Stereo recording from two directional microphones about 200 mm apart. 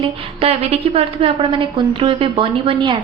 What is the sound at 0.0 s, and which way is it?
A woman's voice, 30° right (ahead or behind).